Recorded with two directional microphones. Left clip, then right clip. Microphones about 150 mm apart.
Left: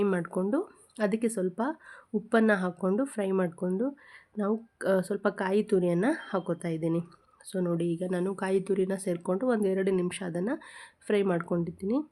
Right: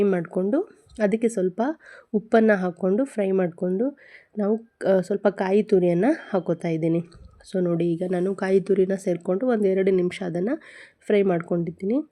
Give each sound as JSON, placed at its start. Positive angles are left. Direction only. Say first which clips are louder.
{"t": 0.0, "sound": "speech", "louder": "right 6 dB", "side_deg": -20}